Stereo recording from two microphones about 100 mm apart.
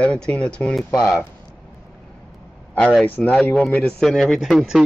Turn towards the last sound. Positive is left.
turn(degrees=0)  # may be behind; listen again after turning